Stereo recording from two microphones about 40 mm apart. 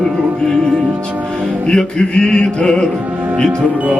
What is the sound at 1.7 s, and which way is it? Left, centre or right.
Mantra, left.